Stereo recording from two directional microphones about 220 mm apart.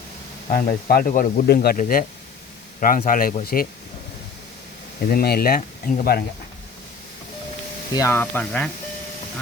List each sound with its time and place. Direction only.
0.4 s speech: 40° left (ahead or behind)
5.0 s speech: 45° left (ahead or behind)
7.9 s speech: 10° left (ahead or behind)